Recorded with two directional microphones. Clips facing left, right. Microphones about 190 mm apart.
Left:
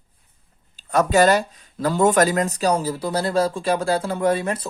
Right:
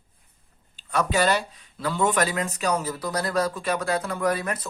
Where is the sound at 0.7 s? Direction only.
45° left (ahead or behind).